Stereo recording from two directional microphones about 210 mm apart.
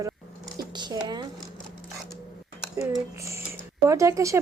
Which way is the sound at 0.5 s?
20° right (ahead or behind).